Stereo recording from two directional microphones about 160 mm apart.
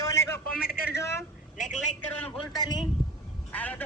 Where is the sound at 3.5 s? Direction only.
10° left (ahead or behind).